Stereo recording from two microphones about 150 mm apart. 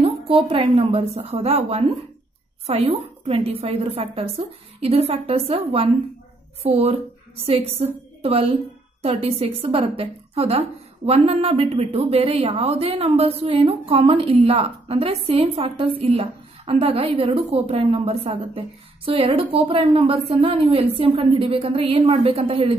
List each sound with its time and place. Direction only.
0.0 s a woman's voice: 40° right (ahead or behind)